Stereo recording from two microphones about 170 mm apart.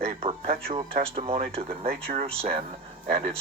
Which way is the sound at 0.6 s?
35° right (ahead or behind).